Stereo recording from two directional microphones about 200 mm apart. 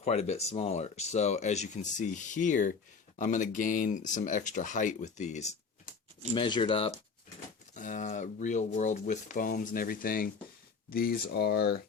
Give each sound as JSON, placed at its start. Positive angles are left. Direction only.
{"t": 0.0, "sound": "speech", "side_deg": 35}
{"t": 6.3, "sound": "speech", "side_deg": 25}
{"t": 7.8, "sound": "speech", "side_deg": 40}